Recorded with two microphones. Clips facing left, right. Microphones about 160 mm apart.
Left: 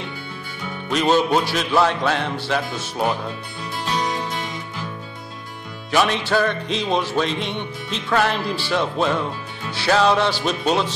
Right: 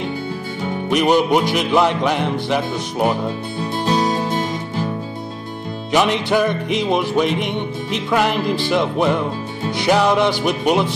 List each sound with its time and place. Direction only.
0.8 s music: 15° right (ahead or behind)
3.8 s music: 35° right (ahead or behind)
5.9 s music: 15° right (ahead or behind)